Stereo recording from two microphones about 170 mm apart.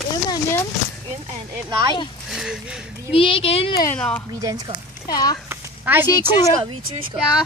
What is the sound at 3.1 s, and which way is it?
Speech, 35° left (ahead or behind).